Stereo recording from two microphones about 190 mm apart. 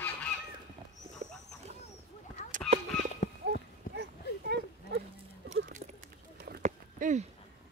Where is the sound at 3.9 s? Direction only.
45° left (ahead or behind).